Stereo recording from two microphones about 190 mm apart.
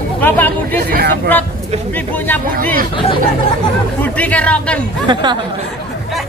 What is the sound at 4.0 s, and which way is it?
Speech, 5° left (ahead or behind).